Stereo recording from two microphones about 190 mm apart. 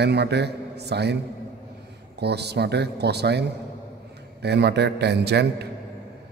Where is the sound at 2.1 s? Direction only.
60° right (ahead or behind).